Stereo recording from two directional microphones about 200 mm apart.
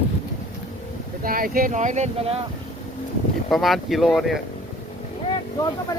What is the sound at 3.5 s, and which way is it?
Speech, centre (ahead or behind).